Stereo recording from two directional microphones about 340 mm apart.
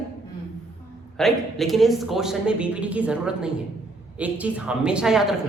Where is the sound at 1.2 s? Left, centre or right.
Centre.